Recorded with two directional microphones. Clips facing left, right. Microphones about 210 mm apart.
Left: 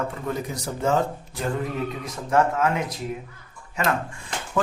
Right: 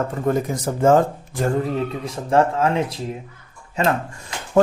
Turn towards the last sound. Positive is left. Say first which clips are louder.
# right 9 dB
turn(degrees=-40)  # may be behind; listen again after turning